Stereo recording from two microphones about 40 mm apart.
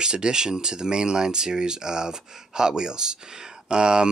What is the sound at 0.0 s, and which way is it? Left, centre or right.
Speech, centre.